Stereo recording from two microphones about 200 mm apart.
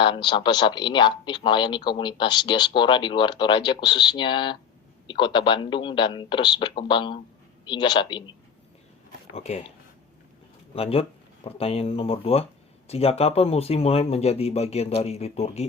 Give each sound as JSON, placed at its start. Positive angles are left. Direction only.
{"t": 0.0, "sound": "speech", "side_deg": 25}
{"t": 10.8, "sound": "speech", "side_deg": 30}